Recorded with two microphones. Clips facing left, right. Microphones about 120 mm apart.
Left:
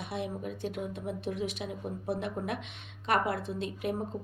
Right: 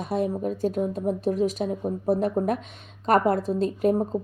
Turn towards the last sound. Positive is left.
turn(degrees=-40)  # may be behind; listen again after turning